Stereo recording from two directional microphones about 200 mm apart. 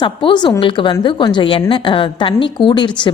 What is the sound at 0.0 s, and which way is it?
A woman's voice, 25° left (ahead or behind).